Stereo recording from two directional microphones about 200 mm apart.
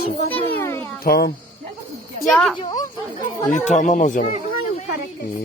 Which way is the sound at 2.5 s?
20° left (ahead or behind).